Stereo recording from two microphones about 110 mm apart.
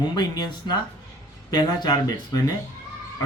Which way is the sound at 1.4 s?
40° left (ahead or behind).